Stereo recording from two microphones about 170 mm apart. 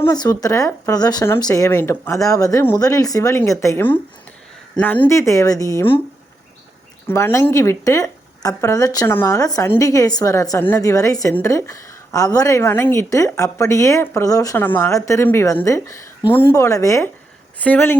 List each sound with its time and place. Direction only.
0.0 s speech: 20° left (ahead or behind)
5.0 s speech: 15° left (ahead or behind)
7.1 s speech: 15° left (ahead or behind)